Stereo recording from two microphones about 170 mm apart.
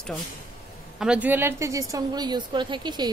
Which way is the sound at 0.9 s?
5° right (ahead or behind).